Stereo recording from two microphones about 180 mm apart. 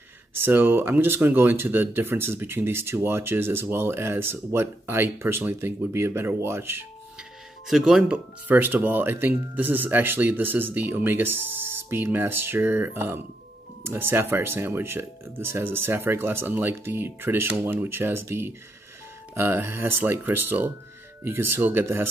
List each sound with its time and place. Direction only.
0.3 s speech: 10° right (ahead or behind)
7.6 s speech: centre (ahead or behind)